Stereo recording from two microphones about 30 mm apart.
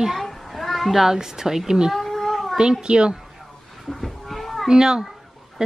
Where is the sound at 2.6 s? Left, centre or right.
Right.